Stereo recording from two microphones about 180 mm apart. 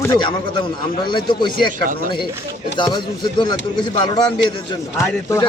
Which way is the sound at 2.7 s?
25° left (ahead or behind).